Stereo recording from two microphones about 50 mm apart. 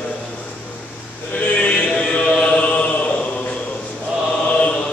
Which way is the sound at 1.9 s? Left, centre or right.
Centre.